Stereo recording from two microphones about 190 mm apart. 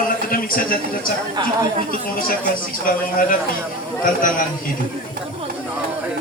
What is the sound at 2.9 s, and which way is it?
Speech, 50° left (ahead or behind).